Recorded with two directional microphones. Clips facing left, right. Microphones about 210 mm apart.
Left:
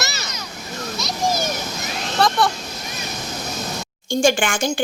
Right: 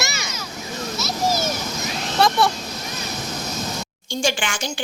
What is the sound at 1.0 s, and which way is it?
Children playing, 5° right (ahead or behind).